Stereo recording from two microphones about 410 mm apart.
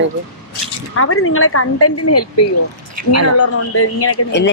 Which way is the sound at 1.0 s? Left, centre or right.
Left.